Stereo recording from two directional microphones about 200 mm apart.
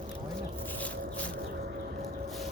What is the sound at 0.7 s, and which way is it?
Music, 5° left (ahead or behind).